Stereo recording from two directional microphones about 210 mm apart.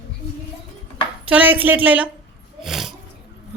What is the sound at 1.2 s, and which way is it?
Speech, 5° right (ahead or behind).